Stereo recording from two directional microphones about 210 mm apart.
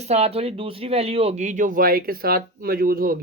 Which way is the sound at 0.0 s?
30° right (ahead or behind).